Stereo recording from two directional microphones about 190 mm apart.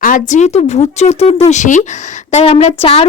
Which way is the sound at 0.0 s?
40° left (ahead or behind).